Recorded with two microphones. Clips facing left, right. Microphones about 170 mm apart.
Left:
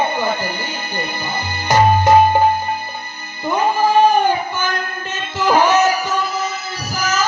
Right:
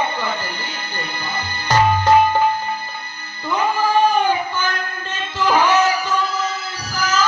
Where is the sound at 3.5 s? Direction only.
10° left (ahead or behind).